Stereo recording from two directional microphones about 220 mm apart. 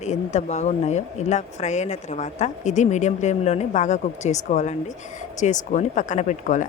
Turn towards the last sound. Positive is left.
turn(degrees=35)  # may be behind; listen again after turning